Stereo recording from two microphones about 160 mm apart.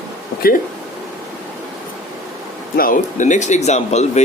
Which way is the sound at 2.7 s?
60° left (ahead or behind).